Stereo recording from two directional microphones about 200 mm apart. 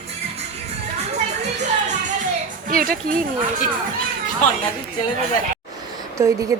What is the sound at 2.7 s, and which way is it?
Speech, 45° right (ahead or behind).